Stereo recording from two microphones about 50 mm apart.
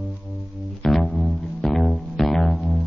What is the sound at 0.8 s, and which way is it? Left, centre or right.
Music, centre.